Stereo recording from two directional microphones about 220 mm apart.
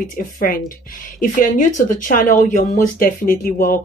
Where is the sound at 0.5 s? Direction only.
40° left (ahead or behind).